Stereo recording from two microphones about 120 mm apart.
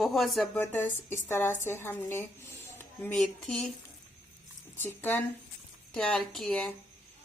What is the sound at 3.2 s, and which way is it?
Speech, 5° left (ahead or behind).